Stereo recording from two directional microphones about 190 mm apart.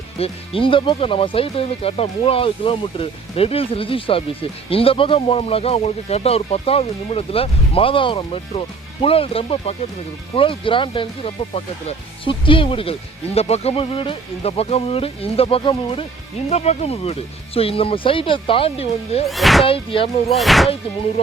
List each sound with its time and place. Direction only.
0.2 s speech: 30° left (ahead or behind)
19.3 s speech: centre (ahead or behind)
19.6 s speech: 30° left (ahead or behind)
20.3 s speech: centre (ahead or behind)